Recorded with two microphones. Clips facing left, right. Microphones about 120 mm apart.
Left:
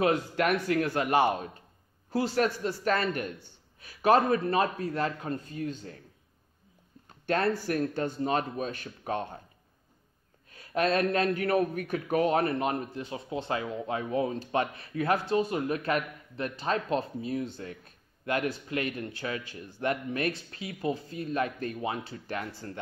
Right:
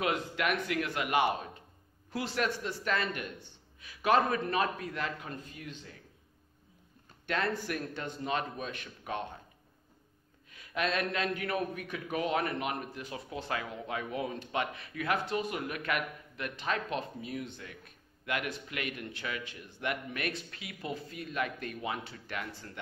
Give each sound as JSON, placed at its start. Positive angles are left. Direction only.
{"t": 0.0, "sound": "a man's voice", "side_deg": 40}
{"t": 7.2, "sound": "a man's voice", "side_deg": 40}
{"t": 10.5, "sound": "a man's voice", "side_deg": 40}